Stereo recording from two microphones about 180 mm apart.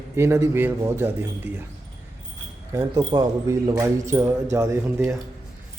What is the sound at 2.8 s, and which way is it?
A man's voice, 20° right (ahead or behind).